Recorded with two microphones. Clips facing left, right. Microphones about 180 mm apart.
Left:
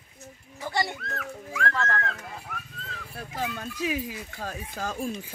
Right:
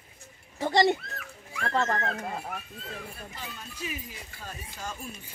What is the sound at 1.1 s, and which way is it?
Dog, 75° left (ahead or behind).